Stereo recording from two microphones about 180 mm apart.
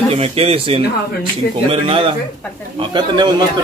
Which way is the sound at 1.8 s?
30° right (ahead or behind).